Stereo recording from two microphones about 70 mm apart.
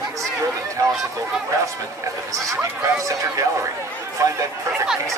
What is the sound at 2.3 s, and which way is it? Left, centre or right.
Speech, right.